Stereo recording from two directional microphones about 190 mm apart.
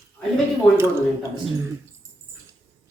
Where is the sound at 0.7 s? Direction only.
15° right (ahead or behind).